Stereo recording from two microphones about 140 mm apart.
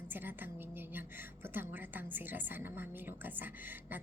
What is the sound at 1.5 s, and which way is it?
A woman's voice, 15° right (ahead or behind).